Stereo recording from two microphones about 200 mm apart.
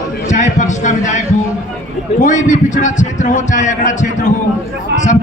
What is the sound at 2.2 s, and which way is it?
A man's voice, 40° left (ahead or behind).